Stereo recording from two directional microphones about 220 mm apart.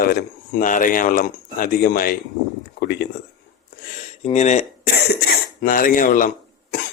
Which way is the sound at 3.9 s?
30° left (ahead or behind).